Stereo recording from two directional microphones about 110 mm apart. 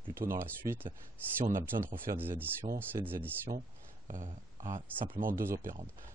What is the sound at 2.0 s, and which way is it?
Speech, 20° right (ahead or behind).